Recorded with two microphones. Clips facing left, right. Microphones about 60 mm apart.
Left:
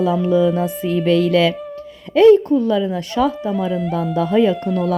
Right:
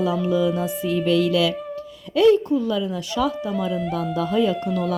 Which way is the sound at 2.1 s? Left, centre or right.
Left.